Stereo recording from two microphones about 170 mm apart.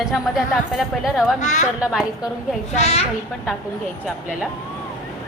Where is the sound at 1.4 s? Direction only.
45° left (ahead or behind).